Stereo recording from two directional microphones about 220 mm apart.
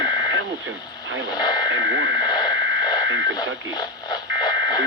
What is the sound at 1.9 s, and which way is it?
Speech, 55° right (ahead or behind).